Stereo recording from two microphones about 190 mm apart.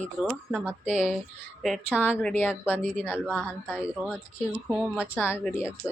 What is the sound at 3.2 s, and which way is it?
Speech, 5° right (ahead or behind).